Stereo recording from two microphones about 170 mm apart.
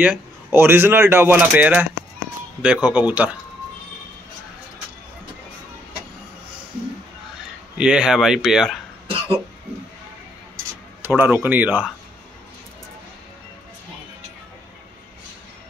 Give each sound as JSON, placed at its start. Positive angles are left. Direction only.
{"t": 0.0, "sound": "speech", "side_deg": -10}
{"t": 7.7, "sound": "speech", "side_deg": -5}
{"t": 11.1, "sound": "speech", "side_deg": -10}